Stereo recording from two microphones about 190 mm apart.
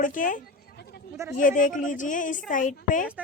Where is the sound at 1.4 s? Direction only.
45° left (ahead or behind).